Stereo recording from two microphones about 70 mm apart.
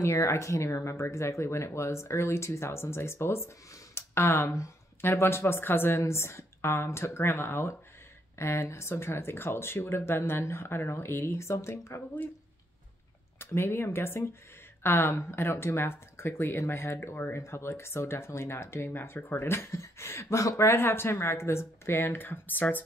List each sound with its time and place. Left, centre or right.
0.0 s speech: left
13.4 s speech: left
19.4 s speech: left